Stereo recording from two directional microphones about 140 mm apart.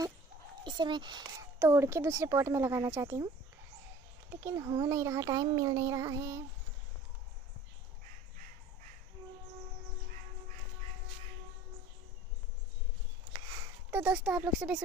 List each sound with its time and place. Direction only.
0.7 s speech: 30° right (ahead or behind)
1.6 s a child's voice: 20° right (ahead or behind)
4.3 s a child's voice: 15° right (ahead or behind)
13.8 s speech: 10° right (ahead or behind)